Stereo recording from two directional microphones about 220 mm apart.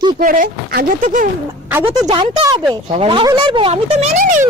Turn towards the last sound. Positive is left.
turn(degrees=-35)  # may be behind; listen again after turning